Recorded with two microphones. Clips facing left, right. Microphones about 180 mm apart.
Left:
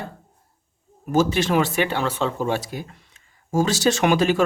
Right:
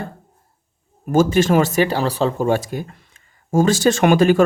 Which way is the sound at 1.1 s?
50° right (ahead or behind).